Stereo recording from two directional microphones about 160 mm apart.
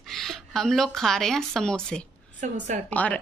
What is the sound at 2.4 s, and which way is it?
Speech, 50° right (ahead or behind).